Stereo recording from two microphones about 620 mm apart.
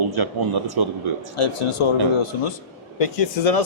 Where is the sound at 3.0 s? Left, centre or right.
Left.